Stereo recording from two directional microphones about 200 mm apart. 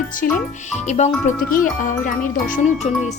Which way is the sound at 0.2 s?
45° left (ahead or behind).